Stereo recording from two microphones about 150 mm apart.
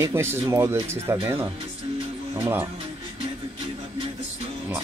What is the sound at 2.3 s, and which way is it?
Speech, 15° right (ahead or behind).